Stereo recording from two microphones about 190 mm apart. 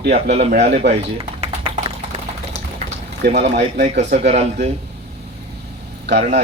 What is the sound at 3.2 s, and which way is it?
Speech, 55° right (ahead or behind).